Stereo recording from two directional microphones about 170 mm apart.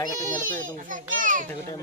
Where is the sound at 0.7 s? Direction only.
50° right (ahead or behind).